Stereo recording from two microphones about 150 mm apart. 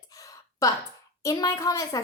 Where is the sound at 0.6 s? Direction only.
20° left (ahead or behind).